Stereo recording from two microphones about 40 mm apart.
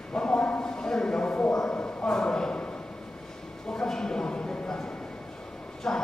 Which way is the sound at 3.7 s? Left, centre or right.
Centre.